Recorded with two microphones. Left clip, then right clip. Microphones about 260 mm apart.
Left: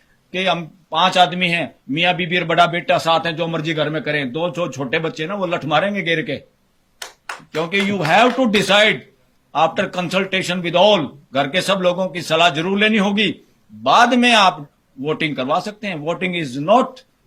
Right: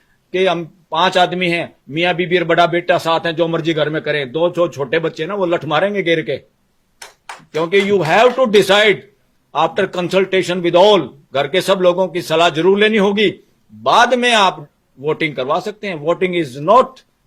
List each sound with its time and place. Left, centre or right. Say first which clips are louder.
0.3 s speech: right 4 dB; right
7.5 s speech: right 6 dB; right